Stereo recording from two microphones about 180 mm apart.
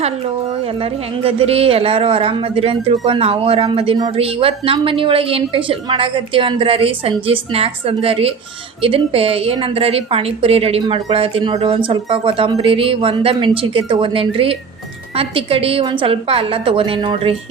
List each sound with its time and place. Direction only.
0.8 s speech: 30° right (ahead or behind)